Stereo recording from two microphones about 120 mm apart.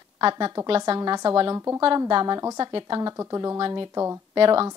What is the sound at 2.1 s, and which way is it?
A woman's voice, 40° right (ahead or behind).